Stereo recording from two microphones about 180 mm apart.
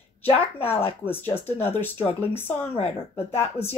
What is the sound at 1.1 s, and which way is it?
Speech, 10° left (ahead or behind).